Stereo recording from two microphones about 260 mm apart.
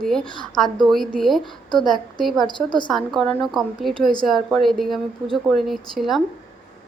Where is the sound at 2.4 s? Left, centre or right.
Centre.